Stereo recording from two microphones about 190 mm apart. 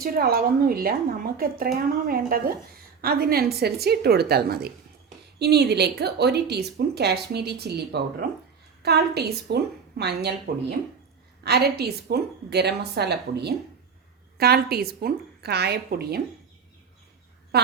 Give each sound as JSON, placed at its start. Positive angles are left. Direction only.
{"t": 0.0, "sound": "a woman's voice", "side_deg": -50}
{"t": 17.5, "sound": "a woman's voice", "side_deg": -55}